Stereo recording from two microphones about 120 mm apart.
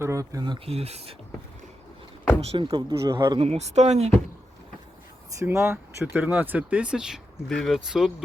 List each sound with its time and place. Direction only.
0.0 s speech: 25° right (ahead or behind)
0.6 s speech: 55° right (ahead or behind)
2.4 s speech: 55° right (ahead or behind)
5.4 s speech: 20° right (ahead or behind); by 8.1 s centre (ahead or behind)